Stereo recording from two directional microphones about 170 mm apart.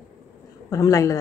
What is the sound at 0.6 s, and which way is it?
Speech, 20° left (ahead or behind).